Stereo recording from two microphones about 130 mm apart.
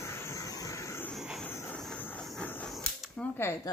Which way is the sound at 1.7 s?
5° left (ahead or behind).